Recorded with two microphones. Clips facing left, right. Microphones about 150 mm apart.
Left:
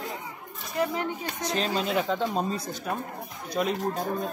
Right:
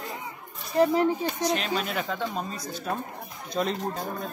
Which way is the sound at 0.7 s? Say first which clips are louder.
Right 7 dB; 35° right (ahead or behind).